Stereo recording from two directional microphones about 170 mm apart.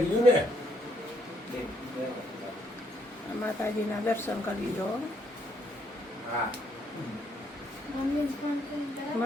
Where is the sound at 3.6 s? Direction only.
15° left (ahead or behind).